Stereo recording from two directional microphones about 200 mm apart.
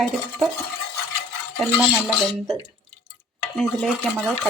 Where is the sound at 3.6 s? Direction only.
Centre (ahead or behind).